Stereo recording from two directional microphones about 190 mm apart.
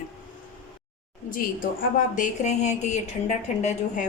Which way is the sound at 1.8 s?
45° left (ahead or behind).